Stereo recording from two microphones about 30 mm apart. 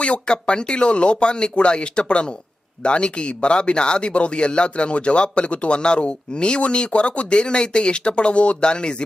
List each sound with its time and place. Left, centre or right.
0.0 s a man's voice: left
8.6 s a man's voice: left